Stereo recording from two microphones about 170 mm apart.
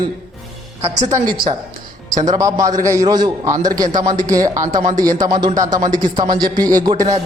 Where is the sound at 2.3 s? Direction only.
20° right (ahead or behind).